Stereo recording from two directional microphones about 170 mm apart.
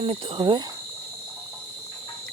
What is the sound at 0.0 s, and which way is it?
Speech, 35° right (ahead or behind).